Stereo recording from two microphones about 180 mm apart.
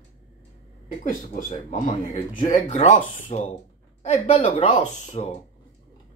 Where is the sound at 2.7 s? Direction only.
45° left (ahead or behind).